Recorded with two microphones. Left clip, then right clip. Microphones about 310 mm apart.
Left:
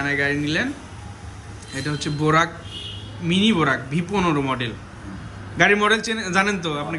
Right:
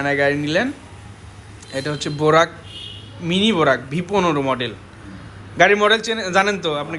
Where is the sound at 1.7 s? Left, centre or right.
Centre.